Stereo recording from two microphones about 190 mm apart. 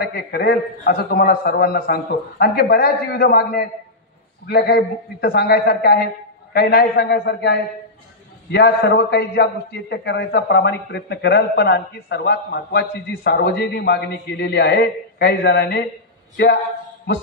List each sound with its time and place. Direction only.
0.0 s a man's voice: 55° left (ahead or behind)